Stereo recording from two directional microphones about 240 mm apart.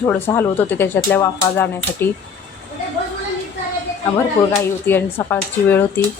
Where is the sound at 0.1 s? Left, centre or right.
Centre.